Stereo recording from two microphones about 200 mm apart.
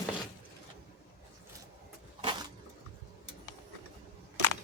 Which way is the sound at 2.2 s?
25° right (ahead or behind).